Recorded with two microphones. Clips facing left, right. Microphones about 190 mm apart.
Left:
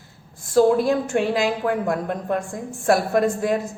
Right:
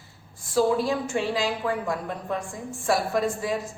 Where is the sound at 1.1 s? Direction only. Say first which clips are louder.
Left 5 dB; 55° left (ahead or behind).